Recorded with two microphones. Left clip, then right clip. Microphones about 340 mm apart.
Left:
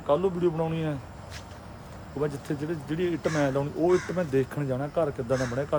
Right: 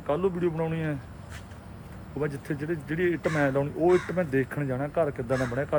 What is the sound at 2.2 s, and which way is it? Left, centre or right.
Speech, centre.